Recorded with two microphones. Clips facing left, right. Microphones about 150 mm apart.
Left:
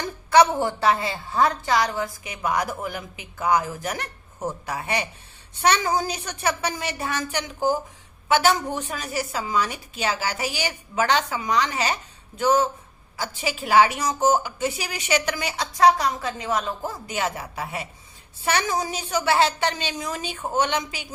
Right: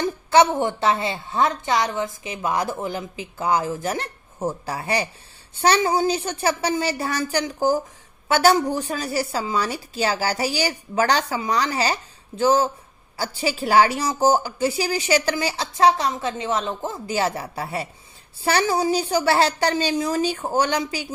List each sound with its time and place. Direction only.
0.0 s a woman's voice: 25° right (ahead or behind)